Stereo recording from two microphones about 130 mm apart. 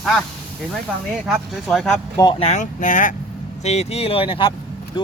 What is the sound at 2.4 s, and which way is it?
Speech, 75° left (ahead or behind).